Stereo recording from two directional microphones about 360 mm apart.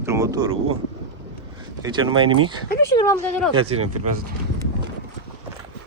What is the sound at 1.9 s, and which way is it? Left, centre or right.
Speech, centre.